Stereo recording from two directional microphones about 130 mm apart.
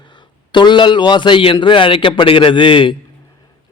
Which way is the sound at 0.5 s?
35° left (ahead or behind).